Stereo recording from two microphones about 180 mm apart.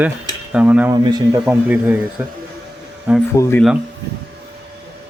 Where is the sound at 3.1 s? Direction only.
10° right (ahead or behind).